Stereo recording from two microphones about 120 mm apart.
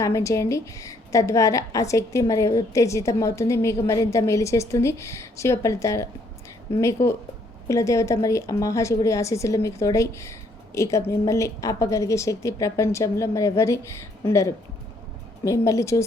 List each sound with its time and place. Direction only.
0.0 s a woman's voice: 25° left (ahead or behind)